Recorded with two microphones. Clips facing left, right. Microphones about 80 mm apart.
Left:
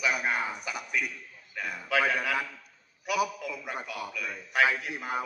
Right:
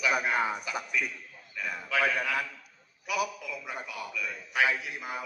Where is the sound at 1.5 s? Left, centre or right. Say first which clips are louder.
Left 2 dB; left.